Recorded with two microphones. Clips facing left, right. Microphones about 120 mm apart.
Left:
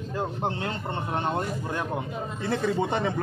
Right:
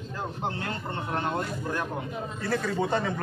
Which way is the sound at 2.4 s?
20° left (ahead or behind).